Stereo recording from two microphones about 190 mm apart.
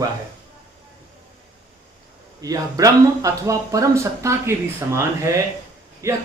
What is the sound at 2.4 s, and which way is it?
Speech, 20° right (ahead or behind).